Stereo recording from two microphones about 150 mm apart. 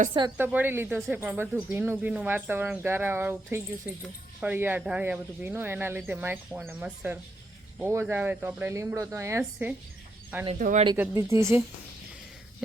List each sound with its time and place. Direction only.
0.3 s a woman's voice: 15° right (ahead or behind)
10.6 s speech: 60° right (ahead or behind)
10.9 s speech: 15° right (ahead or behind)